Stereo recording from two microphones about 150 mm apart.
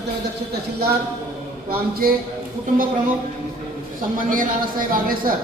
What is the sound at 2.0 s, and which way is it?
Speech, 75° right (ahead or behind).